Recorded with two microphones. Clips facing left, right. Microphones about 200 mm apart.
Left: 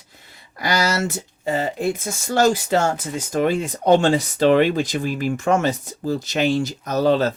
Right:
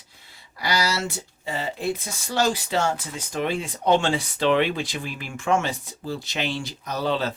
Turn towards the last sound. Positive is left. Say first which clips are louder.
# left 7 dB
turn(degrees=45)  # may be behind; listen again after turning